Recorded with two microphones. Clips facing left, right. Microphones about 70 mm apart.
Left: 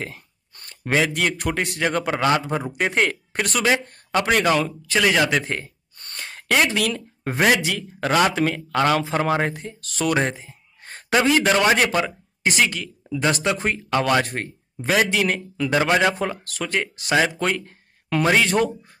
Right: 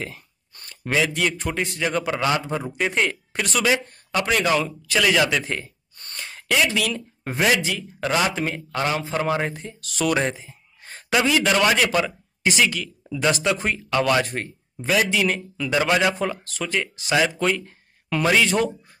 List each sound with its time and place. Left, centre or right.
0.0 s a sound: left
0.9 s speech: left
8.3 s speech: left
9.1 s speech: left
10.4 s a sound: left
11.7 s a man's voice: left
14.2 s speech: left
15.7 s a man's voice: left
16.4 s speech: left